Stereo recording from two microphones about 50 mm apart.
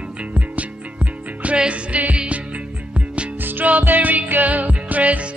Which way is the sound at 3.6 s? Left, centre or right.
Right.